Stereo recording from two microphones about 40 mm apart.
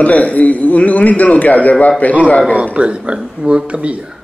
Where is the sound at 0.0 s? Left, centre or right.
Left.